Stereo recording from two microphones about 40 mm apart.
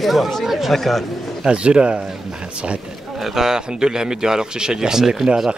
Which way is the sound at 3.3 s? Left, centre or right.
Centre.